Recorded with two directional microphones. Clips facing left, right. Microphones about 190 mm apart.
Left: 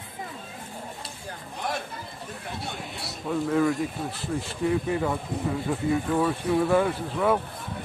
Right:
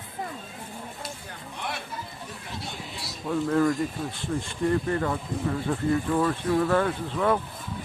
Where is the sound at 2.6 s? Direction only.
60° left (ahead or behind).